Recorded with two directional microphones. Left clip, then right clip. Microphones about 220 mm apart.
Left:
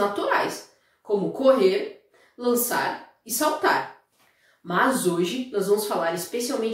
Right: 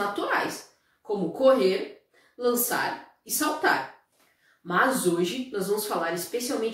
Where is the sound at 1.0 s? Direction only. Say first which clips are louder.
Left 2 dB; centre (ahead or behind).